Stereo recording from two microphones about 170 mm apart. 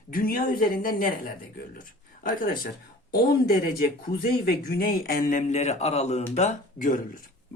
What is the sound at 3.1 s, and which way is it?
Speech, 65° left (ahead or behind).